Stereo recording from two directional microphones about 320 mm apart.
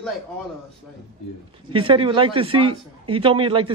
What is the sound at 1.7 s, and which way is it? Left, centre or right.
A man's voice, centre.